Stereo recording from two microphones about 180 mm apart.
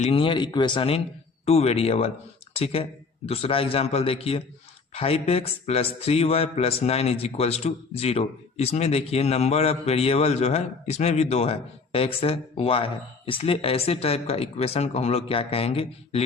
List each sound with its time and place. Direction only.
0.0 s a man's voice: 30° left (ahead or behind)